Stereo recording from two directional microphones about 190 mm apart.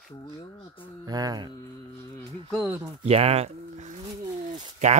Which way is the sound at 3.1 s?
30° right (ahead or behind).